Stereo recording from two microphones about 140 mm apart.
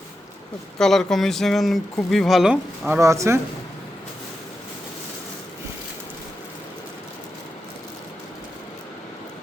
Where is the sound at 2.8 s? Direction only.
20° right (ahead or behind).